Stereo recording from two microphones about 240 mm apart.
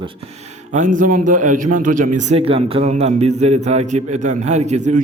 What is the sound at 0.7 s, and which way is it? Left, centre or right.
A man's voice, right.